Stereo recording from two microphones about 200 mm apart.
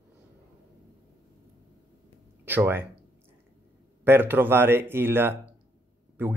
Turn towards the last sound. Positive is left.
turn(degrees=-10)  # may be behind; listen again after turning